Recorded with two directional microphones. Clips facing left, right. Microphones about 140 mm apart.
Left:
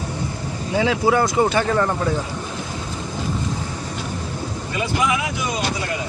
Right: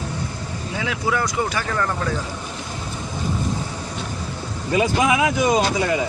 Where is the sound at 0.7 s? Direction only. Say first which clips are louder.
Left 6 dB; 30° left (ahead or behind).